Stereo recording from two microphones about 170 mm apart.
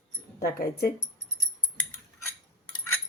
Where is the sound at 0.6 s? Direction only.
65° left (ahead or behind).